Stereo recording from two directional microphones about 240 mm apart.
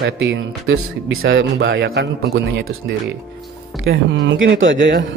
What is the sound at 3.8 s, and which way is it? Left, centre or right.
Speech, right.